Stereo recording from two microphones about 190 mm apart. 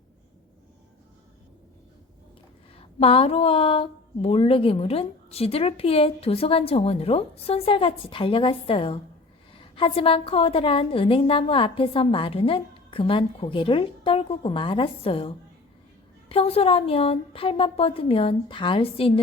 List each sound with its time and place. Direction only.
2.7 s a woman's voice: 30° left (ahead or behind)